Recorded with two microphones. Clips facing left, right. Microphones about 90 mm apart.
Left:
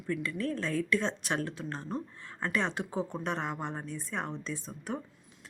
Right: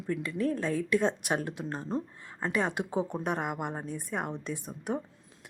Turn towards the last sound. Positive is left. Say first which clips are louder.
# right 3 dB
turn(degrees=-15)  # may be behind; listen again after turning